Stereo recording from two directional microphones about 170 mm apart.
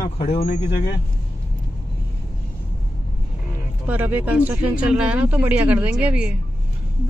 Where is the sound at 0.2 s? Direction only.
35° left (ahead or behind).